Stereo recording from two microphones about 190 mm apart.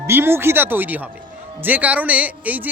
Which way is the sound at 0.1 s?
10° right (ahead or behind).